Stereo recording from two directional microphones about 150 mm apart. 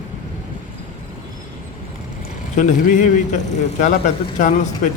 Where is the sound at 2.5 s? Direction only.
55° left (ahead or behind).